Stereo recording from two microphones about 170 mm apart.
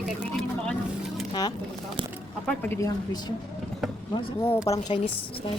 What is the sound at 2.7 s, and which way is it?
Speech, 20° left (ahead or behind).